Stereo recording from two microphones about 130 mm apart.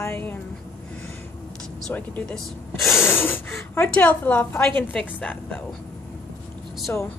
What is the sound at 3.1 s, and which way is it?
Speech, 15° left (ahead or behind).